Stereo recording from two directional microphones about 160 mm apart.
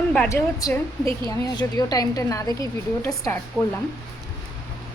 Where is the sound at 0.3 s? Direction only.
15° left (ahead or behind).